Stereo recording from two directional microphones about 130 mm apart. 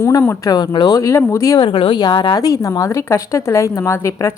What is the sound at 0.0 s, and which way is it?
A woman's voice, 20° left (ahead or behind).